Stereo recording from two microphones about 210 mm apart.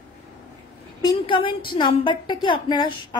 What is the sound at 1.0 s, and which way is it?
A woman's voice, 25° left (ahead or behind).